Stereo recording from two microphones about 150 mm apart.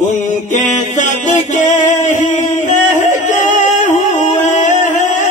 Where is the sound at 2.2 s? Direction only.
55° left (ahead or behind).